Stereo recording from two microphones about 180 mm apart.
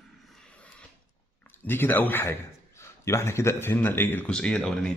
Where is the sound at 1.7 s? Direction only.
10° left (ahead or behind).